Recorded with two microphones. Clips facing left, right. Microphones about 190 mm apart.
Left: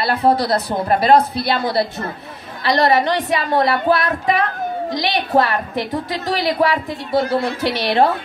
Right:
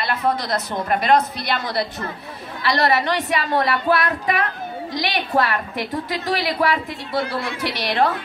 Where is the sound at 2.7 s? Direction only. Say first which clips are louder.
Left 4 dB; 45° left (ahead or behind).